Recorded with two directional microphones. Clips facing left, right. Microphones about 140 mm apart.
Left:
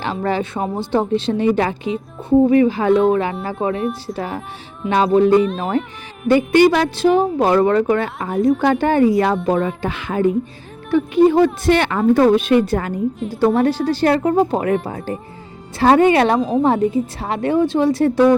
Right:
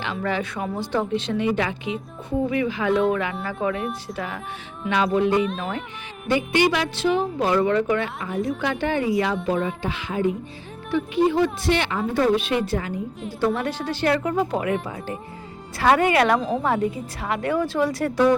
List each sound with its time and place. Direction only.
0.0 s a woman's voice: 35° left (ahead or behind)
13.4 s a woman's voice: 35° left (ahead or behind)